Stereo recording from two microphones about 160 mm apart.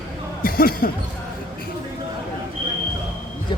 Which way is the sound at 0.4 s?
65° left (ahead or behind).